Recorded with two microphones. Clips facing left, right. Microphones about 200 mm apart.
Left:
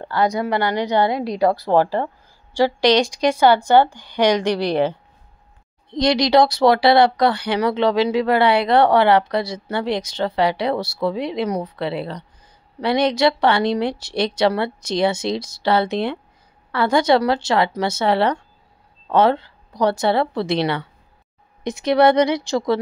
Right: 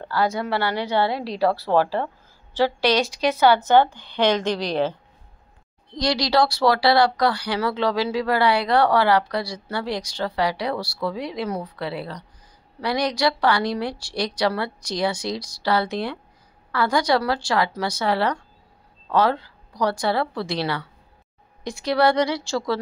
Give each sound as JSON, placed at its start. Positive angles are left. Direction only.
{"t": 0.0, "sound": "a woman's voice", "side_deg": 15}
{"t": 5.9, "sound": "speech", "side_deg": 20}